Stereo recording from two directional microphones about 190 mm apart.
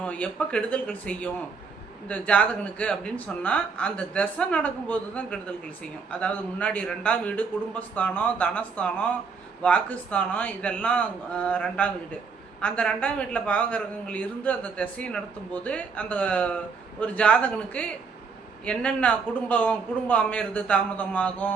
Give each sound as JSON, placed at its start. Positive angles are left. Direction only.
{"t": 0.0, "sound": "speech", "side_deg": 5}